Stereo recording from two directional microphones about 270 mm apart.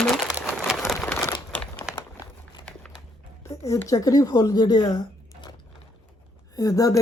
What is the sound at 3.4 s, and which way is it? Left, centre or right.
Speech, centre.